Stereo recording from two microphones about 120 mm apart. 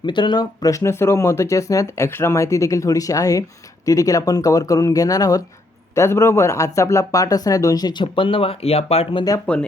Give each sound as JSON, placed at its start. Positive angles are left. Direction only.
{"t": 0.0, "sound": "speech", "side_deg": 40}
{"t": 9.5, "sound": "speech", "side_deg": 10}